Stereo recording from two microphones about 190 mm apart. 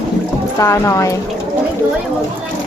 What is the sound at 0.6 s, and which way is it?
Speech, 15° left (ahead or behind).